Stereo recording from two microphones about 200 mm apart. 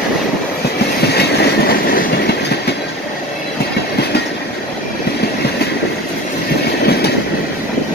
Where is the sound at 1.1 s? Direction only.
50° left (ahead or behind).